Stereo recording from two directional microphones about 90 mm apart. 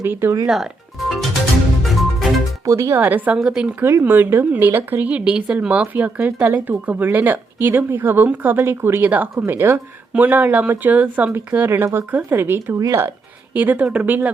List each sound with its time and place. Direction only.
0.0 s a woman's voice: 25° right (ahead or behind)
0.4 s speech: 5° right (ahead or behind)
1.1 s music: centre (ahead or behind)
2.6 s speech: 30° right (ahead or behind)
3.0 s speech: 20° right (ahead or behind)
3.8 s speech: 30° right (ahead or behind)
4.0 s a woman's voice: 20° right (ahead or behind)
12.8 s speech: 35° right (ahead or behind)
13.5 s speech: 20° right (ahead or behind)